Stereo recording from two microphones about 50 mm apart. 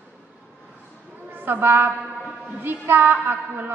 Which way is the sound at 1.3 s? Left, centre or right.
Right.